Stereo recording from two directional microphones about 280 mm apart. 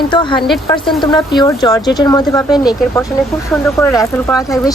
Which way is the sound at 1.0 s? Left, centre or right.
Centre.